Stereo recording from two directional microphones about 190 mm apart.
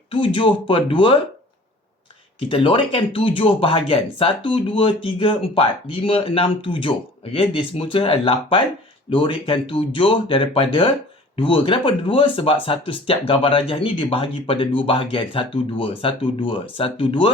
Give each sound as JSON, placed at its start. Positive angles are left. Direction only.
{"t": 0.1, "sound": "speech", "side_deg": 25}
{"t": 2.5, "sound": "speech", "side_deg": 30}